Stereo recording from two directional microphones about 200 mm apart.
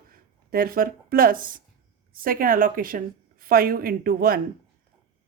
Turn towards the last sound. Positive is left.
turn(degrees=-45)  # may be behind; listen again after turning